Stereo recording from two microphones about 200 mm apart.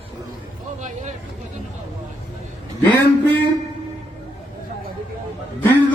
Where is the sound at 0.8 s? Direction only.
35° right (ahead or behind).